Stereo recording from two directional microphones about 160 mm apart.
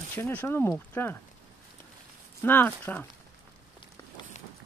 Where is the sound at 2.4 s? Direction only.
10° left (ahead or behind).